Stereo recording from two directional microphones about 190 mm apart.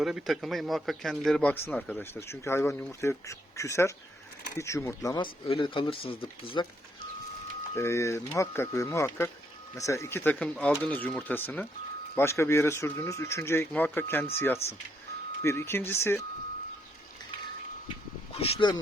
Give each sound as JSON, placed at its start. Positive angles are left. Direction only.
{"t": 0.0, "sound": "speech", "side_deg": -5}
{"t": 7.8, "sound": "speech", "side_deg": 15}
{"t": 18.3, "sound": "speech", "side_deg": 30}